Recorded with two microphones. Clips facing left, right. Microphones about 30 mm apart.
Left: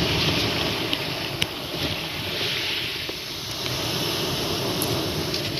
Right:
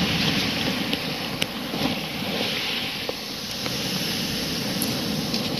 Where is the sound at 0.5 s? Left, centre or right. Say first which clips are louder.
Even; centre.